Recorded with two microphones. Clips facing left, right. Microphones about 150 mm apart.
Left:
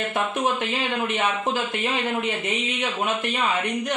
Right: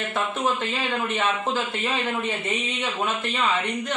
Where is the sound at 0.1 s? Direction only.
15° left (ahead or behind).